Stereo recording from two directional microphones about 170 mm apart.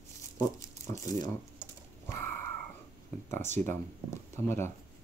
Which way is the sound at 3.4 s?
45° right (ahead or behind).